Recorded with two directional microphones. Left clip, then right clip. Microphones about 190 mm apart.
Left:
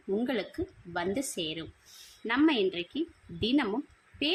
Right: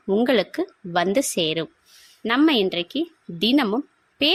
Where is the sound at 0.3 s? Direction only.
50° right (ahead or behind).